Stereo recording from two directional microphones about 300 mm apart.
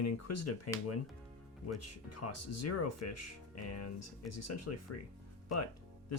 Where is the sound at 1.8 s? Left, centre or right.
Left.